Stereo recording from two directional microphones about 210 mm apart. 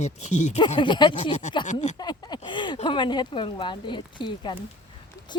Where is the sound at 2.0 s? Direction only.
20° left (ahead or behind).